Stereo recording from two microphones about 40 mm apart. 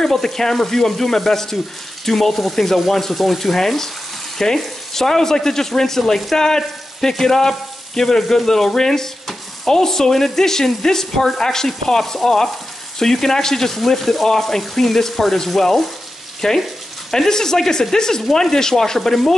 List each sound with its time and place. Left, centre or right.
0.0 s speech: centre